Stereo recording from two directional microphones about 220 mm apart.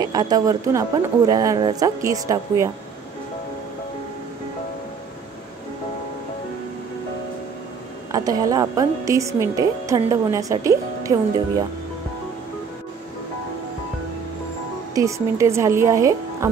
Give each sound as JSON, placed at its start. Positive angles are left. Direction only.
{"t": 0.0, "sound": "a woman's voice", "side_deg": -15}
{"t": 8.1, "sound": "a woman's voice", "side_deg": -15}
{"t": 15.0, "sound": "a woman's voice", "side_deg": -15}